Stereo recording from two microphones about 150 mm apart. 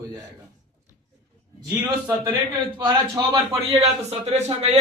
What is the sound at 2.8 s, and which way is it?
A man's voice, 30° right (ahead or behind).